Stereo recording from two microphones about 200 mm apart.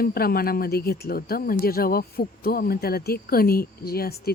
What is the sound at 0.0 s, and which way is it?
Speech, 50° left (ahead or behind).